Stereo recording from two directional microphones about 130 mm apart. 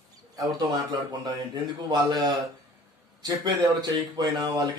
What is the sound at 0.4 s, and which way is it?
A man's voice, 30° right (ahead or behind).